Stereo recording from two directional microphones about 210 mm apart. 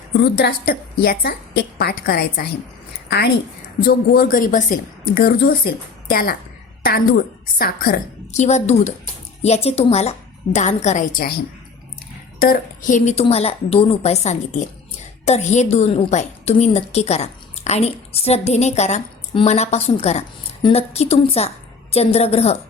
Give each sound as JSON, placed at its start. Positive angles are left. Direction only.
{"t": 0.2, "sound": "speech", "side_deg": 50}
{"t": 7.6, "sound": "a woman's voice", "side_deg": 45}
{"t": 12.4, "sound": "a woman's voice", "side_deg": 40}